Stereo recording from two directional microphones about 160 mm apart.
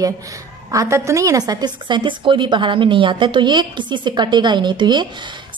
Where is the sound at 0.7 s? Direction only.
20° right (ahead or behind).